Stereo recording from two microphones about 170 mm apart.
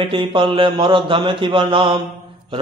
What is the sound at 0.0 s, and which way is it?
A man's voice, 30° right (ahead or behind).